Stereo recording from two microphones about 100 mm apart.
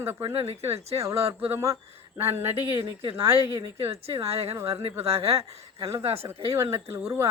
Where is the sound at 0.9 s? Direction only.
30° right (ahead or behind).